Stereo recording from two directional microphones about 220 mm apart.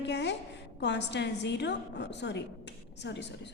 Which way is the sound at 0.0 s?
50° left (ahead or behind).